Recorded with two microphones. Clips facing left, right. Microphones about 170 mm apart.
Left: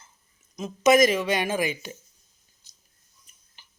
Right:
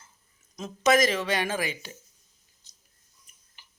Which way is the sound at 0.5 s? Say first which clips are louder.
Left 4 dB; 10° left (ahead or behind).